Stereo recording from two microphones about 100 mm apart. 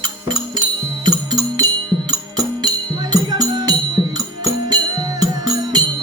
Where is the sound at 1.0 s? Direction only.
40° right (ahead or behind).